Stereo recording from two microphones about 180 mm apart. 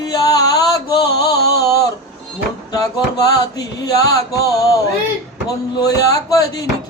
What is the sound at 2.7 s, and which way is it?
Music, 20° left (ahead or behind).